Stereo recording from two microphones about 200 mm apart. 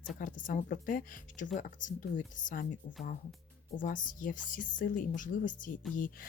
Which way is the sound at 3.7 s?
40° left (ahead or behind).